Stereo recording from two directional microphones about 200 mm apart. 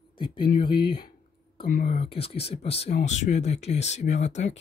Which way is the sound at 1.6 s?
40° left (ahead or behind).